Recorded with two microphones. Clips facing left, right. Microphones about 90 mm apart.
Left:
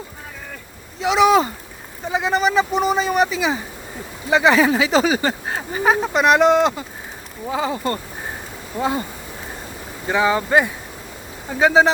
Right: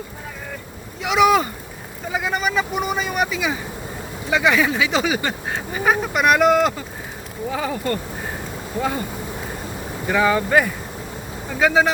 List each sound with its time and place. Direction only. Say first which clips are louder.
0.9 s speech: left 1 dB; 30° left (ahead or behind)
10.1 s speech: even; 20° left (ahead or behind)